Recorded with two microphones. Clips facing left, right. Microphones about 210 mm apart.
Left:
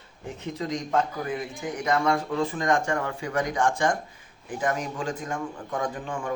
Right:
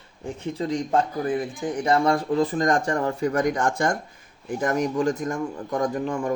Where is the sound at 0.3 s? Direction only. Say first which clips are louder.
Right 4 dB; 30° right (ahead or behind).